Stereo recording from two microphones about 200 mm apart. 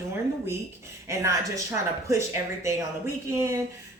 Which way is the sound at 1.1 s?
15° right (ahead or behind).